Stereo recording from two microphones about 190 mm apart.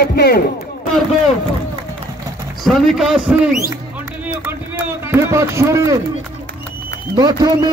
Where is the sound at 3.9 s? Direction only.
10° right (ahead or behind).